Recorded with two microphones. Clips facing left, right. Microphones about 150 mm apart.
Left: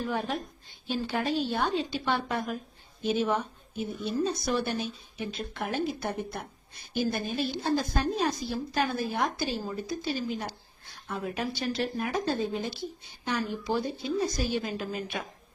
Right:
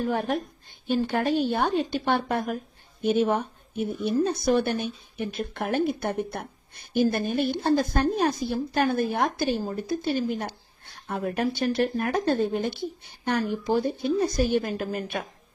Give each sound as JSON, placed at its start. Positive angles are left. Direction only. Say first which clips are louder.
{"t": 0.0, "sound": "a woman's voice", "louder": "right 5 dB", "side_deg": -50}